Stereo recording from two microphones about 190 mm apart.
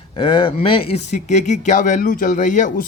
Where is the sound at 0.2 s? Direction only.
25° left (ahead or behind).